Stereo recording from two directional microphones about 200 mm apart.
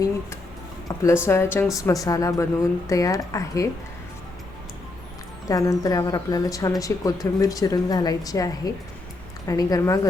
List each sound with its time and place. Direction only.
0.9 s speech: 15° left (ahead or behind)
5.5 s speech: 15° left (ahead or behind)